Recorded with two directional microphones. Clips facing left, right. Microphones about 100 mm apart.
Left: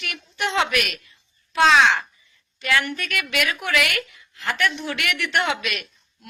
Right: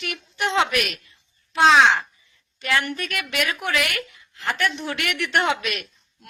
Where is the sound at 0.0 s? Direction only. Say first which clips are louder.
Right 1 dB; 25° right (ahead or behind).